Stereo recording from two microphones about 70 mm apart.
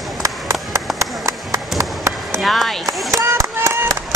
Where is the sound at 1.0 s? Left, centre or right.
Right.